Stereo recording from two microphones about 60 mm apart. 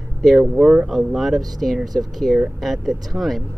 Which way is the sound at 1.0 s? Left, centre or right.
Centre.